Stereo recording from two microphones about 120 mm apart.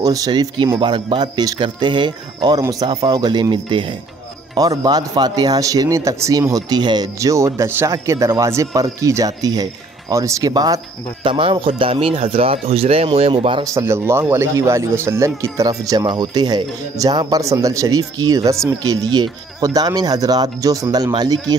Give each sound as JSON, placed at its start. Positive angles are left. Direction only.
{"t": 0.0, "sound": "speech", "side_deg": -30}
{"t": 11.2, "sound": "speech", "side_deg": -45}
{"t": 13.7, "sound": "speech", "side_deg": -20}